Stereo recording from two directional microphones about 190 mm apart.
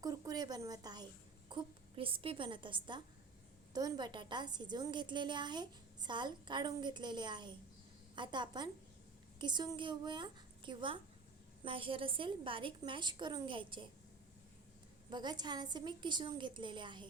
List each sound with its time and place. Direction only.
0.0 s a woman's voice: 20° right (ahead or behind)
15.1 s a woman's voice: 20° right (ahead or behind)